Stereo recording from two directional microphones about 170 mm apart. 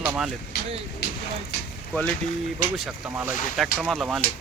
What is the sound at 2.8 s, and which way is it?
Speech, 10° right (ahead or behind).